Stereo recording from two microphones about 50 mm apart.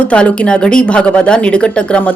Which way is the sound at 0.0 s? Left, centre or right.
Left.